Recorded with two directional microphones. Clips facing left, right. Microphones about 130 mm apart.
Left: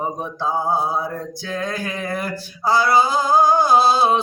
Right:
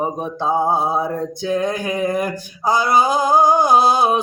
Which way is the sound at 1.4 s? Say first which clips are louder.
Right 6 dB; 20° right (ahead or behind).